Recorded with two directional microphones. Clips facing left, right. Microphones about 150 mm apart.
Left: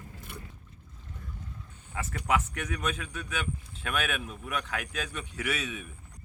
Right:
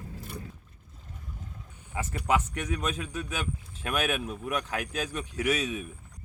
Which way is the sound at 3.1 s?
40° right (ahead or behind).